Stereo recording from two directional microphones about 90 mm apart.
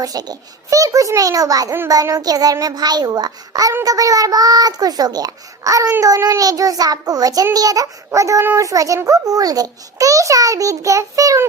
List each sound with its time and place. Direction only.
0.0 s a child's voice: 45° right (ahead or behind)